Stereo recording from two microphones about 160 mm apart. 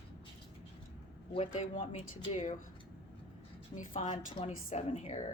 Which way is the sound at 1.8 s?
35° left (ahead or behind).